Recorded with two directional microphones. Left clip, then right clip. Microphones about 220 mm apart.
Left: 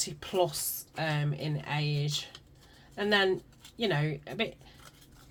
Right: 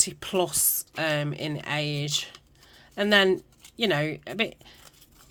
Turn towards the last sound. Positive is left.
turn(degrees=-50)  # may be behind; listen again after turning